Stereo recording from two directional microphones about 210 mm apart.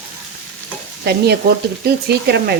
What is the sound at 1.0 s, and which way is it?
Frying, 50° right (ahead or behind).